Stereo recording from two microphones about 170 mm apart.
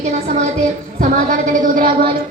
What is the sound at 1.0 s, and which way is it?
Speech, 50° right (ahead or behind).